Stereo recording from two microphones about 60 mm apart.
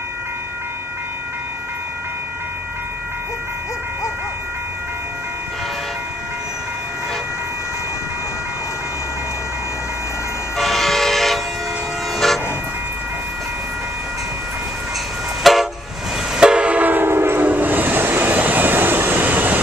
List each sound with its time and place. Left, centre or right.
10.6 s train: centre
12.2 s vehicle: centre
15.4 s train: centre
16.3 s train: centre; by 17.4 s right
17.4 s train: right